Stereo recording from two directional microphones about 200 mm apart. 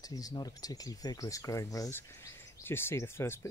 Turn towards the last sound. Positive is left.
turn(degrees=10)  # may be behind; listen again after turning